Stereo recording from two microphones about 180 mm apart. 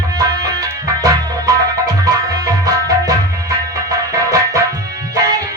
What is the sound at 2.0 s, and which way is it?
Music, 20° right (ahead or behind).